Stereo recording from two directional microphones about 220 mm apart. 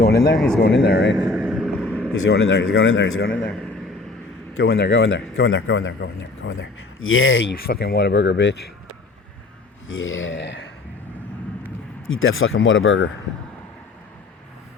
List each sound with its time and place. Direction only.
0.0 s speech: 45° left (ahead or behind)
1.1 s vehicle: 5° right (ahead or behind)
2.3 s speech: 50° left (ahead or behind)
4.6 s a man's voice: 50° left (ahead or behind)
7.7 s speech: 45° left (ahead or behind)
10.0 s a man's voice: 60° left (ahead or behind)
12.0 s a man's voice: 65° left (ahead or behind)